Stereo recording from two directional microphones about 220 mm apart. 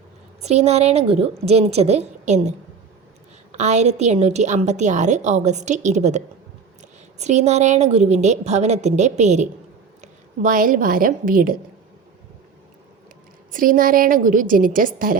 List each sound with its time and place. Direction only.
0.4 s a woman's voice: 30° right (ahead or behind)
13.5 s a woman's voice: 40° right (ahead or behind)